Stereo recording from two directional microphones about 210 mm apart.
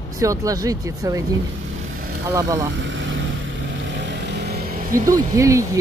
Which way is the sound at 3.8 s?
55° right (ahead or behind).